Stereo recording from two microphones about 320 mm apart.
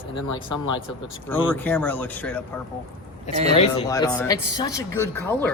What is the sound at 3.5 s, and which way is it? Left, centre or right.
Speech, centre.